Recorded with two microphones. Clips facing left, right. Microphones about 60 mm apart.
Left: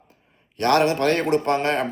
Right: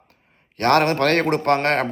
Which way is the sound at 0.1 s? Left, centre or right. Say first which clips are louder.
Even; right.